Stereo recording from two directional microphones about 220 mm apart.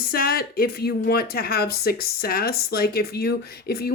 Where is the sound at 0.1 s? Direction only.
40° left (ahead or behind).